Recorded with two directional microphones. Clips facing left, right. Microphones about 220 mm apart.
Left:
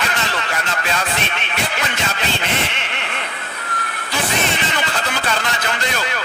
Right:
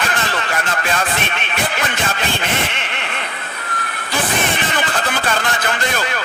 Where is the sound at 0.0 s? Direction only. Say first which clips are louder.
Right 2 dB; 50° right (ahead or behind).